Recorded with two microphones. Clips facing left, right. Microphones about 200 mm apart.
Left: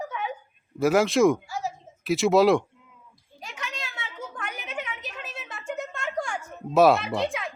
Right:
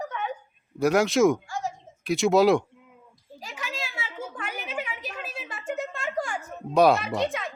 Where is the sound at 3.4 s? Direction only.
5° right (ahead or behind).